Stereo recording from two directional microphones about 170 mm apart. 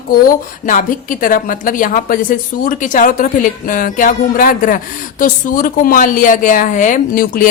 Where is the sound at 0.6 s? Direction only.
50° left (ahead or behind).